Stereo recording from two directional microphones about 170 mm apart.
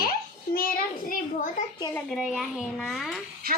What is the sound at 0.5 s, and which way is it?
Speech, 55° left (ahead or behind).